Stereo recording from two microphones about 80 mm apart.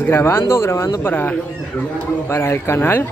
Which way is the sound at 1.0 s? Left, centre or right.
Left.